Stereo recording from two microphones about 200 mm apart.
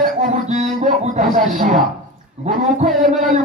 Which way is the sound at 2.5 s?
35° right (ahead or behind).